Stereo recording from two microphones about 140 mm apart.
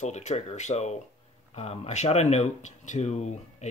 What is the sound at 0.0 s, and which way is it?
Speech, 55° left (ahead or behind).